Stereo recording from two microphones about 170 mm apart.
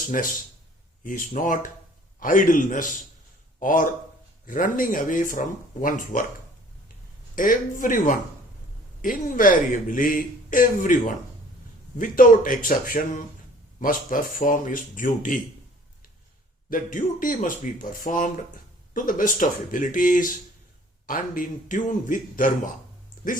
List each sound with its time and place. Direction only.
1.0 s speech: 50° left (ahead or behind)
7.3 s speech: 50° left (ahead or behind)
16.6 s speech: 55° left (ahead or behind)